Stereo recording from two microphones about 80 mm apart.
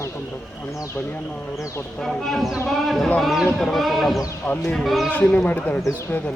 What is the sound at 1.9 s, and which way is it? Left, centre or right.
Speech, centre.